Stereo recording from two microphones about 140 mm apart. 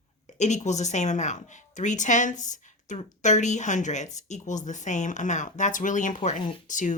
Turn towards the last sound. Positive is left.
turn(degrees=65)  # may be behind; listen again after turning